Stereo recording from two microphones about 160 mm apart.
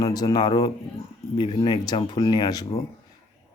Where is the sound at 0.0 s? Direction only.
25° left (ahead or behind).